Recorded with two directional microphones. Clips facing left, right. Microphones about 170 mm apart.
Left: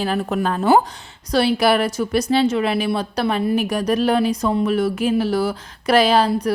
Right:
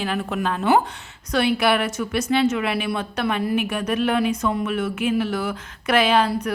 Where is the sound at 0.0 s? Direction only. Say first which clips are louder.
Left 4 dB; 35° left (ahead or behind).